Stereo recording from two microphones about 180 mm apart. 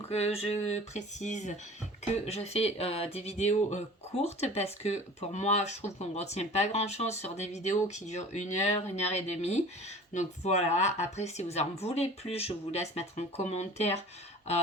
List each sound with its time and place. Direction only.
0.1 s speech: 35° left (ahead or behind)